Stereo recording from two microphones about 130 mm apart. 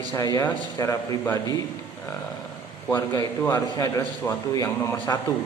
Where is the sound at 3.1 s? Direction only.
30° left (ahead or behind).